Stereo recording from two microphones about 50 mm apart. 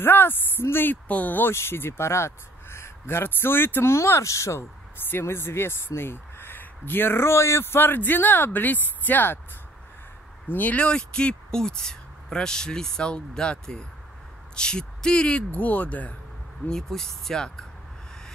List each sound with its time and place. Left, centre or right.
0.0 s speech: left
1.0 s speech: left
1.5 s speech: left
3.9 s speech: left
5.2 s speech: left
10.5 s speech: left
10.9 s speech: centre
15.5 s speech: left
16.6 s speech: centre